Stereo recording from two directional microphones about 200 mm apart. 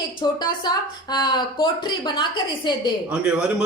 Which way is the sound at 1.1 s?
20° left (ahead or behind).